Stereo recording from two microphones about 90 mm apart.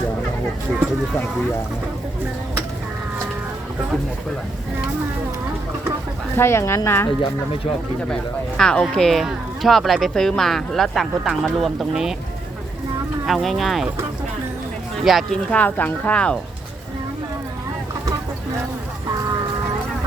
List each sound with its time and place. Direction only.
6.3 s a woman's voice: 30° left (ahead or behind)
7.2 s speech: 90° left
8.1 s speech: 5° left (ahead or behind)
13.2 s speech: centre (ahead or behind)
15.0 s speech: centre (ahead or behind)
15.4 s speech: 15° left (ahead or behind)